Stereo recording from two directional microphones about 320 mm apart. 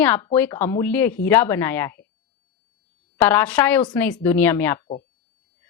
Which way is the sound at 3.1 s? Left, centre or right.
Centre.